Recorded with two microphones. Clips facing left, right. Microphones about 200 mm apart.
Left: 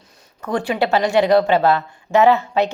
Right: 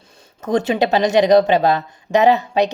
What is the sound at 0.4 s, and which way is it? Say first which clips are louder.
A woman's voice: right 3 dB; 20° right (ahead or behind).